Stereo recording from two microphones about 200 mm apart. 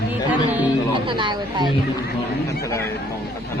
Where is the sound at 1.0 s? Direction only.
25° right (ahead or behind).